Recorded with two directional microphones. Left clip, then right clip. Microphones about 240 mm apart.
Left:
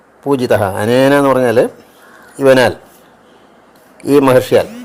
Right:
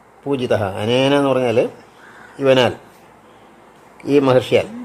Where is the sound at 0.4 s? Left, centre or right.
Centre.